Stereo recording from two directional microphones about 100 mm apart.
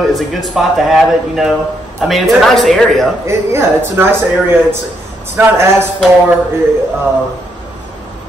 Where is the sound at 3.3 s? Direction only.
25° right (ahead or behind).